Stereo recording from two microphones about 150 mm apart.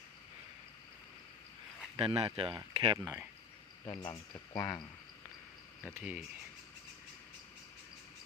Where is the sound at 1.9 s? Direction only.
40° right (ahead or behind).